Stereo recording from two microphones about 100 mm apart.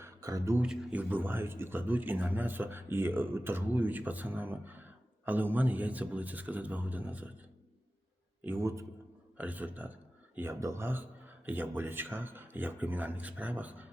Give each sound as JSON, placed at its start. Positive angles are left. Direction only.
{"t": 0.0, "sound": "a sound", "side_deg": -35}
{"t": 0.6, "sound": "a man's voice", "side_deg": -10}
{"t": 8.4, "sound": "a man's voice", "side_deg": -25}
{"t": 9.4, "sound": "a man's voice", "side_deg": -15}
{"t": 10.5, "sound": "a man's voice", "side_deg": -30}